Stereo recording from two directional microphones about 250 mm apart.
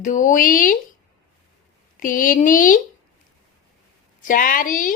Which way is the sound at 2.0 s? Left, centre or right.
Left.